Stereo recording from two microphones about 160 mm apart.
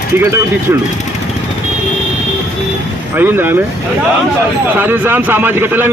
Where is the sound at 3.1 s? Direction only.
15° right (ahead or behind).